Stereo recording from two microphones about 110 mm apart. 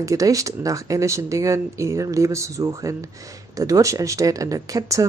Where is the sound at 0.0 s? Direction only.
30° right (ahead or behind).